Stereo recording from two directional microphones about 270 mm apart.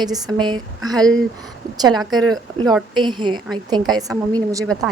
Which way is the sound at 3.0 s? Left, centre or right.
Centre.